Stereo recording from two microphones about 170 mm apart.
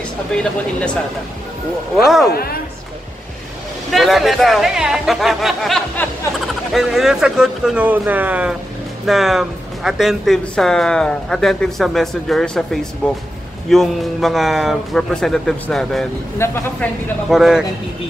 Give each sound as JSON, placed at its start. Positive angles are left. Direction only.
{"t": 0.3, "sound": "speech", "side_deg": 5}
{"t": 2.0, "sound": "speech", "side_deg": 0}
{"t": 2.3, "sound": "a woman's voice", "side_deg": 65}
{"t": 3.9, "sound": "speech", "side_deg": 0}
{"t": 16.3, "sound": "speech", "side_deg": 15}
{"t": 17.3, "sound": "speech", "side_deg": 0}